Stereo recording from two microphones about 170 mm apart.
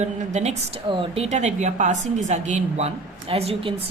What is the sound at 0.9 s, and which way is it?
A woman's voice, 30° right (ahead or behind).